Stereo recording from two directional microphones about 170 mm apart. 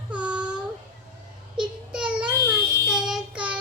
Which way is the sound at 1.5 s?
5° right (ahead or behind).